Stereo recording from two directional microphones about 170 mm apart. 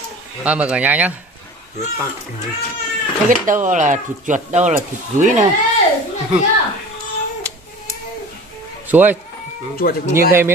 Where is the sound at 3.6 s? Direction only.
45° right (ahead or behind).